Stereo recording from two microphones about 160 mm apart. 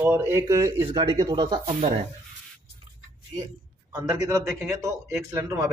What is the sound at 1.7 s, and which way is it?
Speech, 45° right (ahead or behind).